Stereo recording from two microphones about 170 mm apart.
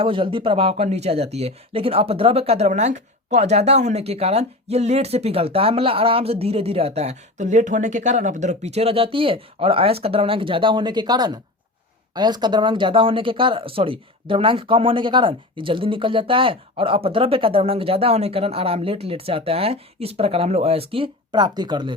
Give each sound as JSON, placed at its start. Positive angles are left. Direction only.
{"t": 0.0, "sound": "speech", "side_deg": -30}